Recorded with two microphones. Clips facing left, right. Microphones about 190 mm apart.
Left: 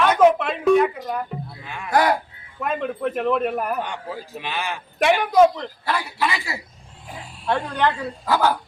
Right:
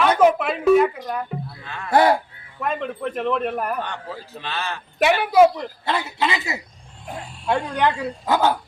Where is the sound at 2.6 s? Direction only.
Centre (ahead or behind).